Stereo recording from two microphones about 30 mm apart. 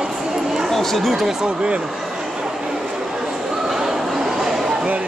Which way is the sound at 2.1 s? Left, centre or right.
Centre.